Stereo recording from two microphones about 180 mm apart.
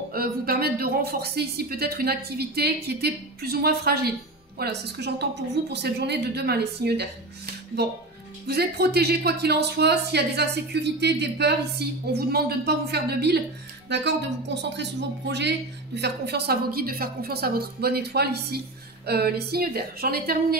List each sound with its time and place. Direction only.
0.1 s speech: 55° right (ahead or behind)